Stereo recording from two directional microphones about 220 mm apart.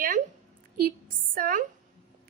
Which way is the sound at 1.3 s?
40° right (ahead or behind).